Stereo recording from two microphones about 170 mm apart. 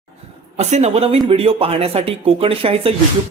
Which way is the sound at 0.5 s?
40° right (ahead or behind).